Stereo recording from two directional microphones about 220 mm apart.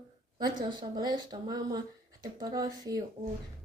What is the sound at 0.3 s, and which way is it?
Speech, 20° right (ahead or behind).